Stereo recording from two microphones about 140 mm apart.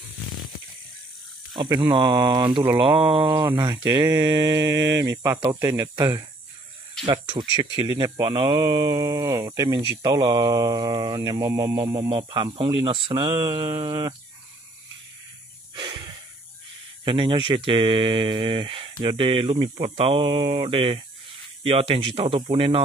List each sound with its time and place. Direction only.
1.5 s speech: 35° right (ahead or behind)
3.4 s speech: 25° right (ahead or behind)
12.1 s speech: 35° right (ahead or behind)
15.7 s snort: 35° right (ahead or behind)
17.0 s speech: 35° right (ahead or behind)